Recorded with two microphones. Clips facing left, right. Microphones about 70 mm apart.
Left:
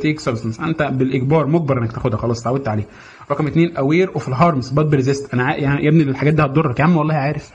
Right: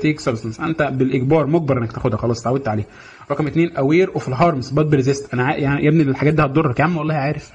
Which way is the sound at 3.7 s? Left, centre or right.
Centre.